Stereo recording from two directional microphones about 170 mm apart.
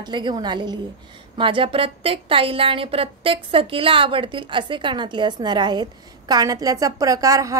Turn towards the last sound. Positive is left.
turn(degrees=-20)  # may be behind; listen again after turning